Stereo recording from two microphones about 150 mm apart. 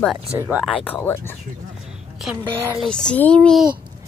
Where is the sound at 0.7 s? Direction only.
5° left (ahead or behind).